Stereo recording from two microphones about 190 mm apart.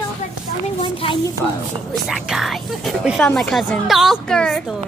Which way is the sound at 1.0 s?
30° left (ahead or behind).